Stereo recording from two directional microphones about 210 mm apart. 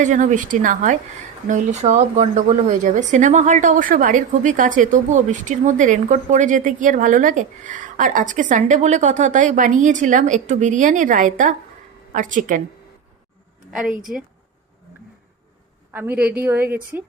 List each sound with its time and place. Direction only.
0.0 s speech: 35° right (ahead or behind)
13.7 s a woman's voice: centre (ahead or behind)
15.9 s a woman's voice: 10° right (ahead or behind)